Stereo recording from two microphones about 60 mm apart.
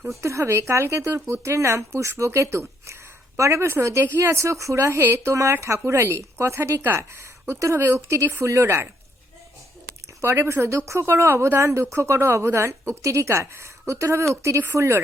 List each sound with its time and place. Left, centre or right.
0.2 s speech: right
10.2 s speech: right